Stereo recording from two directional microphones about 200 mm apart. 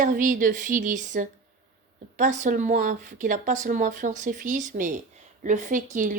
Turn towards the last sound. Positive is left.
turn(degrees=-40)  # may be behind; listen again after turning